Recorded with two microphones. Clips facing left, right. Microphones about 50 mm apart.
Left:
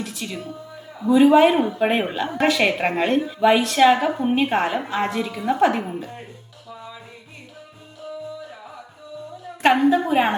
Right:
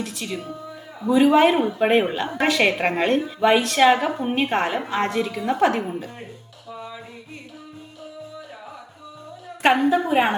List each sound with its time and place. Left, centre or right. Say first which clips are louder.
0.0 s speech: right 1 dB; centre
9.9 s speech: even; centre